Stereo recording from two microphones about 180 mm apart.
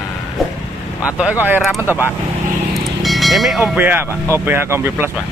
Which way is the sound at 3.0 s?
Centre (ahead or behind).